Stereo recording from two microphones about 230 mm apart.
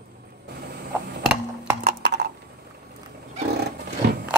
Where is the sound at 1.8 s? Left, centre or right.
Right.